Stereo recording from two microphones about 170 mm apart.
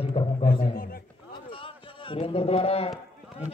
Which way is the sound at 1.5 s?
30° left (ahead or behind).